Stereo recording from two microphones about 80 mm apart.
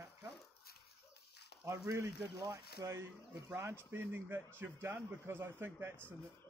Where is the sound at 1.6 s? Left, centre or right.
Right.